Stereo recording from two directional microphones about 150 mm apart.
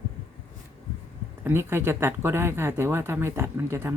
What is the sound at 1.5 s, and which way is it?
Speech, 15° right (ahead or behind).